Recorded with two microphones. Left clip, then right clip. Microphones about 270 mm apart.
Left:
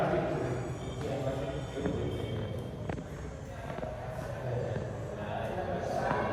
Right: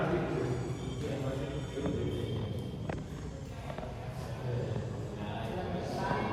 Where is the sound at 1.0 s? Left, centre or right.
Centre.